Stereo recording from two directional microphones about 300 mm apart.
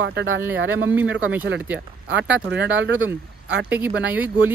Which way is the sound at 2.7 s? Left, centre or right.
Right.